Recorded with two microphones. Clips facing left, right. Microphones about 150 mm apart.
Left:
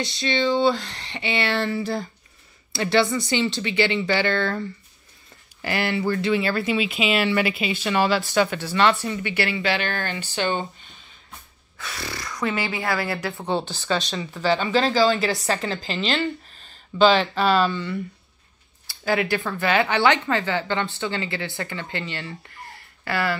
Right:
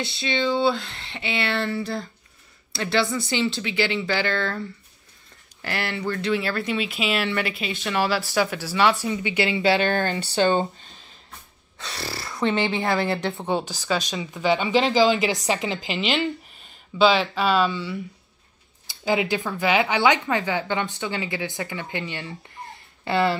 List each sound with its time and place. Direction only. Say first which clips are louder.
0.0 s speech: left 2 dB; 5° right (ahead or behind)
9.6 s speech: right 5 dB; 30° right (ahead or behind)
11.8 s speech: even; 30° right (ahead or behind); by 18.0 s 5° right (ahead or behind)
18.9 s speech: even; 20° right (ahead or behind)
22.6 s a sound: right 3 dB; 20° right (ahead or behind)